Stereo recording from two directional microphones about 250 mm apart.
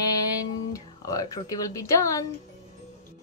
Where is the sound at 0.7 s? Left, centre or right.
Centre.